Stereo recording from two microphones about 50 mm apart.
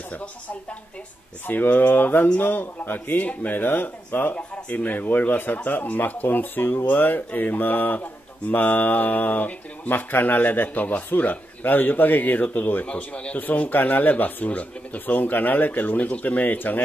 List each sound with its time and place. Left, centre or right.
0.1 s speech: left
1.4 s speech: left
12.8 s speech: left
13.4 s speech: left